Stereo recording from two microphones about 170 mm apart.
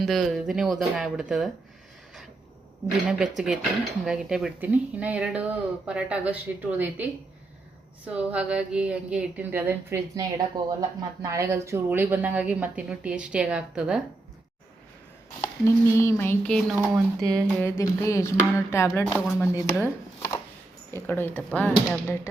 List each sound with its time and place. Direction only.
0.0 s speech: centre (ahead or behind)
3.1 s a woman's voice: 5° right (ahead or behind)
15.6 s speech: 15° left (ahead or behind)
17.6 s speech: 15° left (ahead or behind)
19.2 s speech: centre (ahead or behind)
19.8 s chopping: 15° left (ahead or behind)
20.9 s speech: 15° left (ahead or behind)